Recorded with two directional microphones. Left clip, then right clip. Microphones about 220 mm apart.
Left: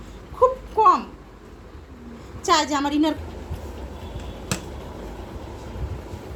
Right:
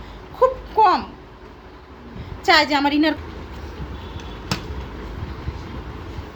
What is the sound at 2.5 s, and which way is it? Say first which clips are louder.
Speech: right 4 dB; 10° right (ahead or behind).